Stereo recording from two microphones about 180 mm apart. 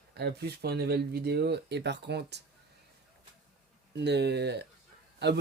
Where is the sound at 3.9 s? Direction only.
70° right (ahead or behind).